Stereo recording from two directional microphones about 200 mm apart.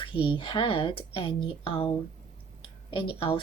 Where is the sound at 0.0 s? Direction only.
25° left (ahead or behind).